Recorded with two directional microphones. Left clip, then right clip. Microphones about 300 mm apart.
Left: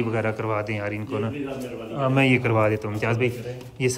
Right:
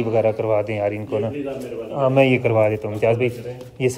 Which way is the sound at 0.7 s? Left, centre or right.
Centre.